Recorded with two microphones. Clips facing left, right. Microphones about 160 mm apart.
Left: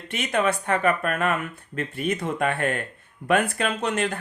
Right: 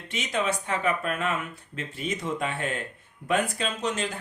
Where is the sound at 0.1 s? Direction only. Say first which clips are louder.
Left 4 dB; 60° left (ahead or behind).